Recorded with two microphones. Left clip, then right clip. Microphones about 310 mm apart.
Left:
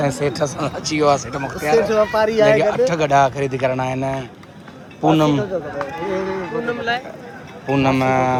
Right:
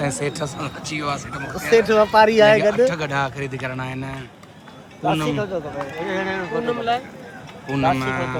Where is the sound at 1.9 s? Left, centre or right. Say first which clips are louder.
Right 2 dB; right.